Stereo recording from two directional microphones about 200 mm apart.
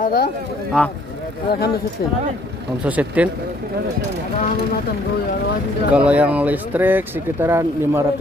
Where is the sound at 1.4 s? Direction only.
50° left (ahead or behind).